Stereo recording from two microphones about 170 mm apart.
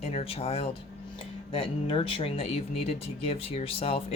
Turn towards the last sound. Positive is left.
turn(degrees=35)  # may be behind; listen again after turning